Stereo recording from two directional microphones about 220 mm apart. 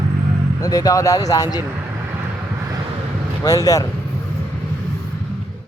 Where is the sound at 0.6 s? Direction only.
15° left (ahead or behind).